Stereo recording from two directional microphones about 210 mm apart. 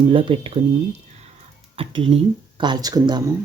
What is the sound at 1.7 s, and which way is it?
Speech, 25° right (ahead or behind).